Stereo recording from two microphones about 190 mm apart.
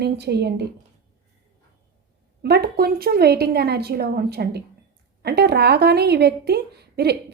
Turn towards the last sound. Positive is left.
turn(degrees=-60)  # may be behind; listen again after turning